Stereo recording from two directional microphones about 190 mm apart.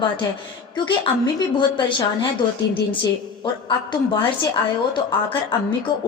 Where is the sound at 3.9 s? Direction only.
25° left (ahead or behind).